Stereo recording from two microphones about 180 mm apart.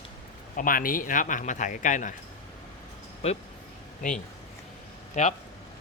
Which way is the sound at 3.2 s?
35° left (ahead or behind).